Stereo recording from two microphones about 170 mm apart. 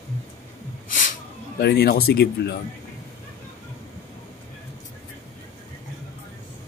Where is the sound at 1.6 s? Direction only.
75° left (ahead or behind).